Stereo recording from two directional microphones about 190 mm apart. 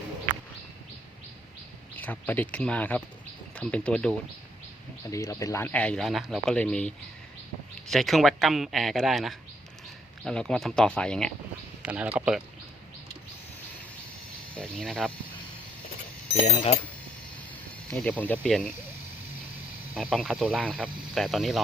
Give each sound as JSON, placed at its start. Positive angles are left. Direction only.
{"t": 2.0, "sound": "speech", "side_deg": 10}
{"t": 5.1, "sound": "speech", "side_deg": 15}
{"t": 11.8, "sound": "speech", "side_deg": -5}
{"t": 14.5, "sound": "speech", "side_deg": 5}
{"t": 16.4, "sound": "speech", "side_deg": 30}
{"t": 17.9, "sound": "speech", "side_deg": 5}
{"t": 20.0, "sound": "speech", "side_deg": 0}